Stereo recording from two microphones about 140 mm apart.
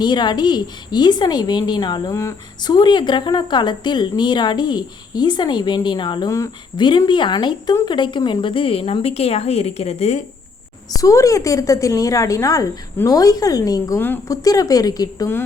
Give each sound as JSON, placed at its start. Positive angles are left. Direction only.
{"t": 0.0, "sound": "a woman's voice", "side_deg": 30}
{"t": 10.9, "sound": "a woman's voice", "side_deg": 25}